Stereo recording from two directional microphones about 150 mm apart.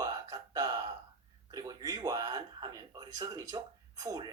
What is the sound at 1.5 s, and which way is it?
Speech, 25° right (ahead or behind).